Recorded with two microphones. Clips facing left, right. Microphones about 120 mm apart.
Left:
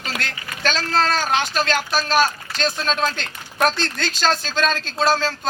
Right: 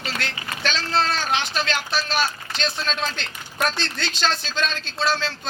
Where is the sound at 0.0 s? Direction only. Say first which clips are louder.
Left 1 dB; 45° left (ahead or behind).